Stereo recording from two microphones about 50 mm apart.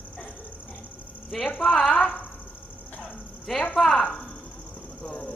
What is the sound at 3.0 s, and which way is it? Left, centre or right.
Dog, centre.